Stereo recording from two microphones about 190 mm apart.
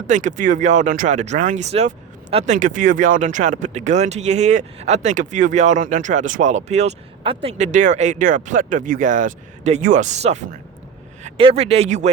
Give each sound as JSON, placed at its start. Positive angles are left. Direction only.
{"t": 0.1, "sound": "a man's voice", "side_deg": -40}